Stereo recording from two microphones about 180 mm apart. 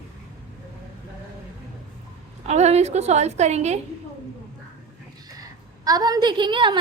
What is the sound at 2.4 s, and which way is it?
A woman's voice, 40° right (ahead or behind).